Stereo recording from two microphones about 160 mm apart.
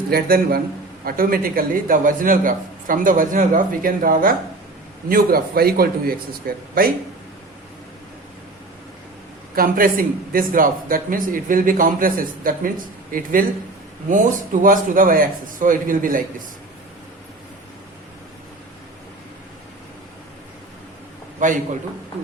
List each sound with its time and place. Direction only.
0.1 s a man's voice: 70° right (ahead or behind)
9.6 s a man's voice: 65° right (ahead or behind)
21.4 s a man's voice: 50° right (ahead or behind)